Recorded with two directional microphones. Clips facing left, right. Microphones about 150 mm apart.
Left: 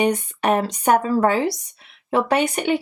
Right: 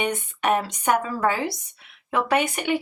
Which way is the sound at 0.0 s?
35° left (ahead or behind).